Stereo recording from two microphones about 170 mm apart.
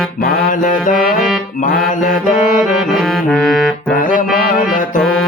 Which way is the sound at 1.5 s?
50° left (ahead or behind).